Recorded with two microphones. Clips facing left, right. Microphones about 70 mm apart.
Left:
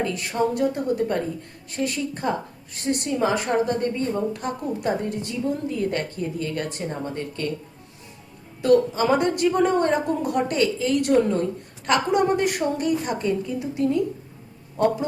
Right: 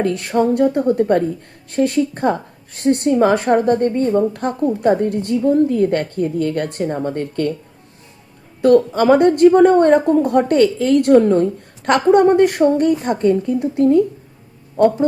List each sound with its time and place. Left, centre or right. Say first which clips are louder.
0.0 s a woman's voice: right 7 dB; right
8.6 s a woman's voice: right 6 dB; right